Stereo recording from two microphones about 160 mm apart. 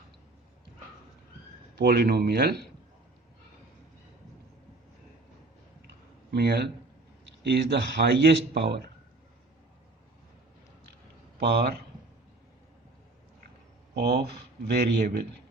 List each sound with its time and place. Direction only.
1.8 s speech: 80° right
5.9 s a sound: 90° right
7.4 s speech: 90° right
11.3 s speech: 90° right
13.9 s speech: 90° right